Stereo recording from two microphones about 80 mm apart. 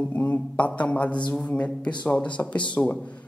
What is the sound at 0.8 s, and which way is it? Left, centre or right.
A man's voice, centre.